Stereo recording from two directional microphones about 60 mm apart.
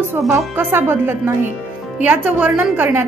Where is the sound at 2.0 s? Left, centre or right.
Right.